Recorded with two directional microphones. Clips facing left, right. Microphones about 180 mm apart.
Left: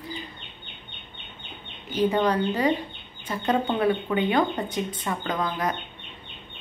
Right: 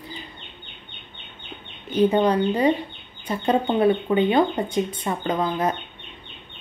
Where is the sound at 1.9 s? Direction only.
20° right (ahead or behind).